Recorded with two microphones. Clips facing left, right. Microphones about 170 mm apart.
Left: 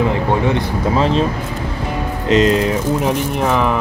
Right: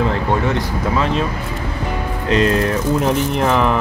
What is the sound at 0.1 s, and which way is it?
Speech, 15° left (ahead or behind).